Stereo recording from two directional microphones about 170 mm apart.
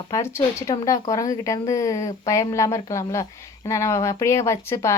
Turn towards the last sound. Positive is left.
turn(degrees=15)  # may be behind; listen again after turning